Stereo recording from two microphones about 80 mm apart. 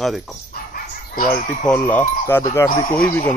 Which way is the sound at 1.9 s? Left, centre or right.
Left.